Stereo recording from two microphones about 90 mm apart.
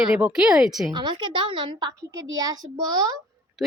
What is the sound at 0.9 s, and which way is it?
A woman's voice, 60° right (ahead or behind).